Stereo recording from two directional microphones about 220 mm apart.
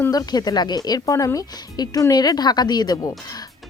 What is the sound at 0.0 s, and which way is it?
Speech, 15° left (ahead or behind).